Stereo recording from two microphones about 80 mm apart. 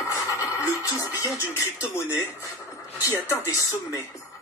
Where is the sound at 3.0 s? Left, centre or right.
Left.